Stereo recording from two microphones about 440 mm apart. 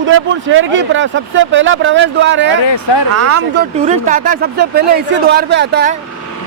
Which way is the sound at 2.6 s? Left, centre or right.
Left.